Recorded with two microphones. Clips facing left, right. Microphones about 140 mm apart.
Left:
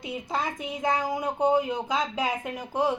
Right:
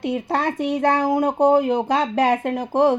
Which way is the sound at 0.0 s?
70° right (ahead or behind).